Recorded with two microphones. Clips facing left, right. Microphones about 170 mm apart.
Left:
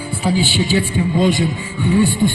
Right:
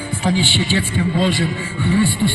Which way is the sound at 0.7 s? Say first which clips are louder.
Left 2 dB; 15° left (ahead or behind).